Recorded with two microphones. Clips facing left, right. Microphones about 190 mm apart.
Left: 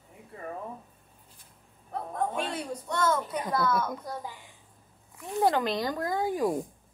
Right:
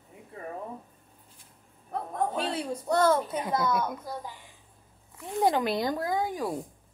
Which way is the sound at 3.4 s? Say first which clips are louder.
Left 2 dB; 15° right (ahead or behind).